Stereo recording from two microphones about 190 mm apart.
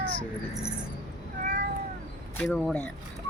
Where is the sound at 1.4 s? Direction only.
45° right (ahead or behind).